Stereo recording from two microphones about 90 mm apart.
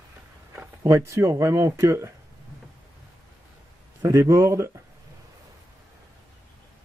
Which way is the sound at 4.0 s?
40° right (ahead or behind).